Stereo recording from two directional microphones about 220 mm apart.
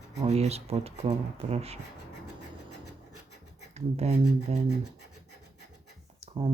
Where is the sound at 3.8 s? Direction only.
30° right (ahead or behind).